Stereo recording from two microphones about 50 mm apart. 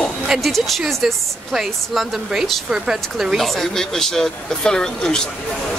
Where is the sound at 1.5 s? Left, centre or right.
Centre.